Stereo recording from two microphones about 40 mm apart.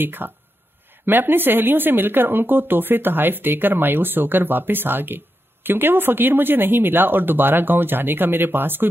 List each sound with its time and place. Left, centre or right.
0.0 s speech: right